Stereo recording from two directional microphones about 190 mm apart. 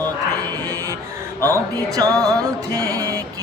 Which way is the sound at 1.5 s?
20° right (ahead or behind).